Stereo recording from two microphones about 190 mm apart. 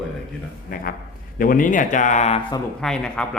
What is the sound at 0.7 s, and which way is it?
A man's voice, 50° left (ahead or behind).